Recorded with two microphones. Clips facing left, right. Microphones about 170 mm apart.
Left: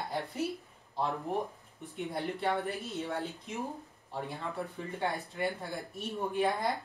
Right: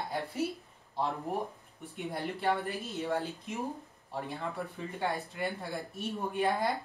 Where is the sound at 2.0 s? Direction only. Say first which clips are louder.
Left 1 dB; centre (ahead or behind).